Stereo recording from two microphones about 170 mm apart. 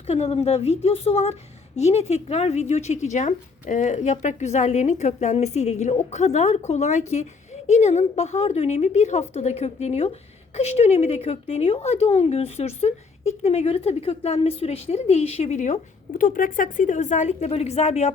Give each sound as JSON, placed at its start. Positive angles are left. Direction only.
{"t": 0.1, "sound": "a woman's voice", "side_deg": 40}